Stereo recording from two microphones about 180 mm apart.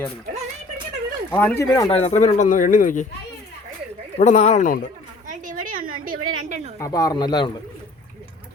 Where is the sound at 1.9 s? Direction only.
35° left (ahead or behind).